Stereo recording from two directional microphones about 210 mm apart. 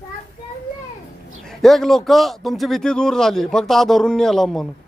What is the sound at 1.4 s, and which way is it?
A man's voice, centre (ahead or behind).